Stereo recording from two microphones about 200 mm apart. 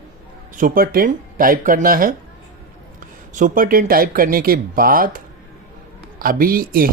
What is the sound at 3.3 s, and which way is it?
A man's voice, 40° right (ahead or behind).